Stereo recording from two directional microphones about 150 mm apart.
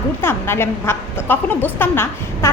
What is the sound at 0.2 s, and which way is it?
A woman's voice, 15° left (ahead or behind).